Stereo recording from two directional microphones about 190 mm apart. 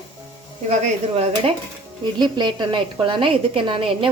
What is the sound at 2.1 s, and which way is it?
A woman's voice, 25° right (ahead or behind).